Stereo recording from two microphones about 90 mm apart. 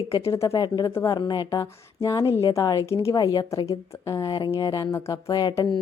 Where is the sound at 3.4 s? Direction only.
35° left (ahead or behind).